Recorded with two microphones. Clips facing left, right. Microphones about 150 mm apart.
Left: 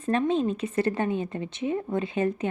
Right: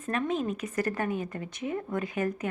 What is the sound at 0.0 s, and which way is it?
A woman's voice, 30° left (ahead or behind).